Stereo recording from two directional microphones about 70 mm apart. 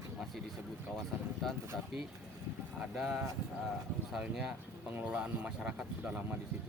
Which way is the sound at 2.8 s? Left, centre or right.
Centre.